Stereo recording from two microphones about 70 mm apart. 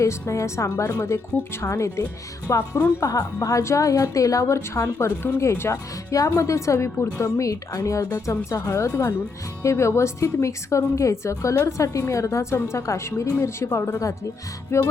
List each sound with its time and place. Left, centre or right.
0.0 s a woman's voice: left